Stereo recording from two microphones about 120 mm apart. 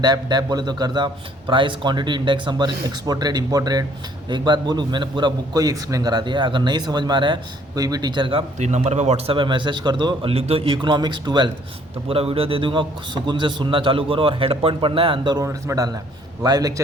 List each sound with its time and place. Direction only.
0.0 s a man's voice: 35° right (ahead or behind)
7.8 s a man's voice: 30° right (ahead or behind)
8.5 s a man's voice: 75° right (ahead or behind); by 10.3 s 40° right (ahead or behind)
10.3 s a man's voice: 55° right (ahead or behind); by 11.5 s 40° right (ahead or behind)
12.0 s a man's voice: 55° right (ahead or behind)
15.4 s a man's voice: 25° right (ahead or behind)